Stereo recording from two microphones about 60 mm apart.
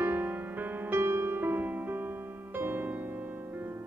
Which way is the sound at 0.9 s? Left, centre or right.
Right.